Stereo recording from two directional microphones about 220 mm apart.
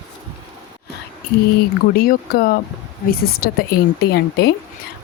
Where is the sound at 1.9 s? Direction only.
40° left (ahead or behind).